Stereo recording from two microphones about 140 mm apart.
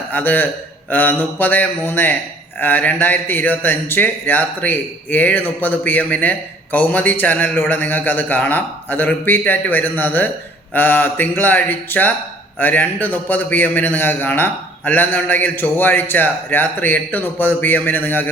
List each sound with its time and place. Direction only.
0.1 s speech: 15° left (ahead or behind)